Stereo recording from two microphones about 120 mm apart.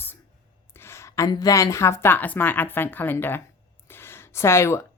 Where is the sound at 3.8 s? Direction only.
20° left (ahead or behind).